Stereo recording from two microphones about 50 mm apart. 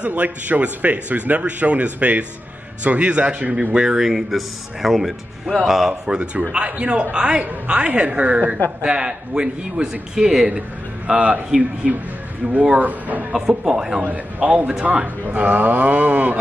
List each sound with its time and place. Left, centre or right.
0.0 s speech: right; by 5.9 s centre
6.0 s speech: right
8.8 s a man's voice: centre
11.1 s speech: right
11.8 s a man's voice: centre
12.7 s speech: right
13.3 s a man's voice: centre
14.0 s speech: right